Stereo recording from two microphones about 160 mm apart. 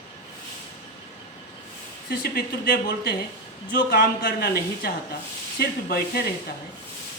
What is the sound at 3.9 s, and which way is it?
A woman's voice, 90° left.